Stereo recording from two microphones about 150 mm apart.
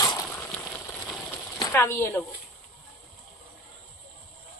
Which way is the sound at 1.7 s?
15° left (ahead or behind).